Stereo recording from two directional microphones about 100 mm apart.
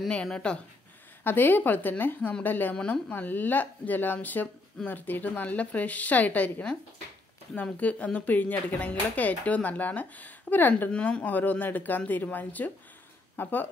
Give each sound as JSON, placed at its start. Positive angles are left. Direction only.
{"t": 0.1, "sound": "speech", "side_deg": 10}
{"t": 1.2, "sound": "speech", "side_deg": 20}